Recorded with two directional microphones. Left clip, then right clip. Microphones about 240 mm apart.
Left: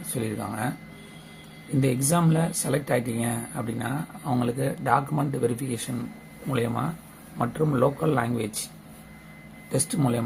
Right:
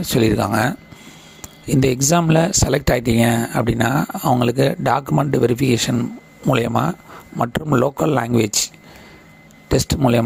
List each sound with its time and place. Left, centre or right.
0.1 s speech: right
1.8 s speech: right
9.7 s speech: right